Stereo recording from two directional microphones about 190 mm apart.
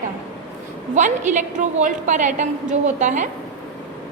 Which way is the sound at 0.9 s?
40° right (ahead or behind).